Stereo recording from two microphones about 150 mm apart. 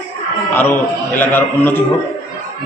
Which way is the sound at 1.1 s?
15° left (ahead or behind).